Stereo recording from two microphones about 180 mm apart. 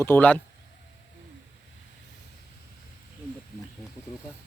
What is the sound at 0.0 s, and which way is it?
Speech, 10° left (ahead or behind).